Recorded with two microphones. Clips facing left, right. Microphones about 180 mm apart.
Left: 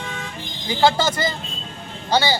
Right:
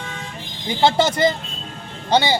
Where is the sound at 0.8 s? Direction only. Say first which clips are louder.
Right 2 dB; 25° right (ahead or behind).